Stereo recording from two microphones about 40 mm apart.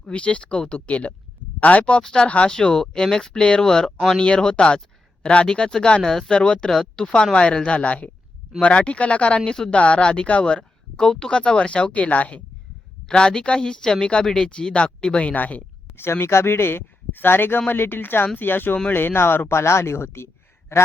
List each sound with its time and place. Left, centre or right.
0.0 s a woman's voice: left
2.5 s a woman's voice: centre
5.5 s speech: centre
6.3 s a woman's voice: left
6.7 s a woman's voice: centre; by 9.5 s left
9.5 s speech: centre
9.7 s a woman's voice: left
10.9 s a woman's voice: centre; by 12.4 s left
13.1 s a woman's voice: centre
15.3 s speech: left
16.0 s a man's voice: left